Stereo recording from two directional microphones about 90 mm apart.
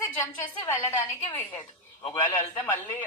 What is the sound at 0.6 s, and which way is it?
Speech, 30° left (ahead or behind).